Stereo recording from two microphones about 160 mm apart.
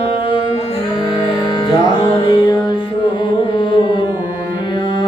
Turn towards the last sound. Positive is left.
turn(degrees=30)  # may be behind; listen again after turning